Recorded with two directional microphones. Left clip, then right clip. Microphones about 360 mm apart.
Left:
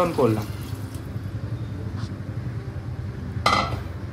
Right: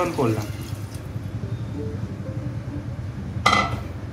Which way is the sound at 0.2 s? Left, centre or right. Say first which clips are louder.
Left 3 dB; left.